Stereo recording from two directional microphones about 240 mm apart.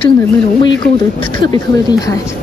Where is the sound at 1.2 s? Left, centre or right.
Centre.